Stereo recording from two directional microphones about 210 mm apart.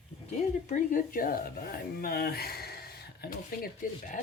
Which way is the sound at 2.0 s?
45° left (ahead or behind).